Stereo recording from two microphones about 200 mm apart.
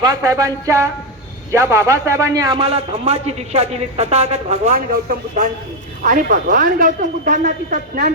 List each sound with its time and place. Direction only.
0.0 s a man's voice: 15° right (ahead or behind); by 8.0 s 40° right (ahead or behind)